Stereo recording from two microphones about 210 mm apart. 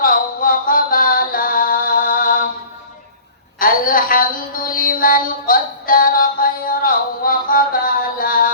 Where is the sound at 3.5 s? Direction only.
40° left (ahead or behind).